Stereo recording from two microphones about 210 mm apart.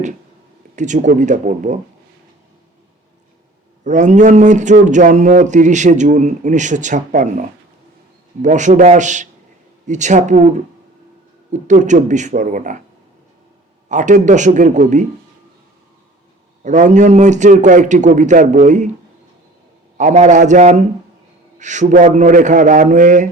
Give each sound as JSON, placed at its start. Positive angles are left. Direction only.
{"t": 0.8, "sound": "speech", "side_deg": -35}
{"t": 3.8, "sound": "speech", "side_deg": -35}
{"t": 11.5, "sound": "speech", "side_deg": -35}
{"t": 13.8, "sound": "speech", "side_deg": -35}
{"t": 16.6, "sound": "speech", "side_deg": -35}
{"t": 20.0, "sound": "speech", "side_deg": -35}